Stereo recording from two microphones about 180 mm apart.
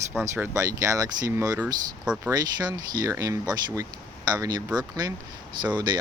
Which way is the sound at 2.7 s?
20° right (ahead or behind).